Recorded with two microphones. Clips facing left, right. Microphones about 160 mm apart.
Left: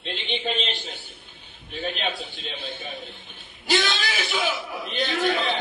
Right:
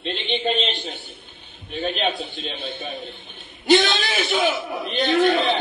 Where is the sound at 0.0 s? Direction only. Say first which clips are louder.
Right 5 dB; 65° right (ahead or behind).